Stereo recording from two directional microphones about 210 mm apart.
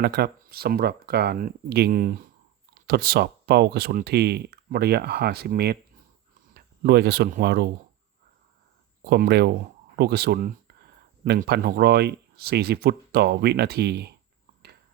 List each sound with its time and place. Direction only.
0.0 s speech: 50° right (ahead or behind)
9.0 s speech: 50° right (ahead or behind)